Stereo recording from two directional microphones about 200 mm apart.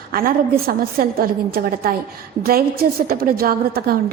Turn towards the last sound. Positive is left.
turn(degrees=-50)  # may be behind; listen again after turning